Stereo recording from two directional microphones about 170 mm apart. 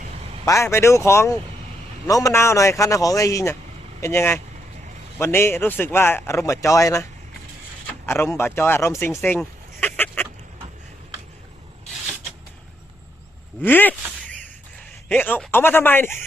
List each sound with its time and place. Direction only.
0.4 s a man's voice: 15° left (ahead or behind)
8.0 s speech: 15° left (ahead or behind)
13.6 s a sound: 10° left (ahead or behind)
15.1 s speech: 10° left (ahead or behind)